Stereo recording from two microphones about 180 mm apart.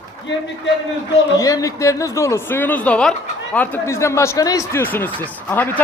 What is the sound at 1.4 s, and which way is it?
Speech, 20° left (ahead or behind).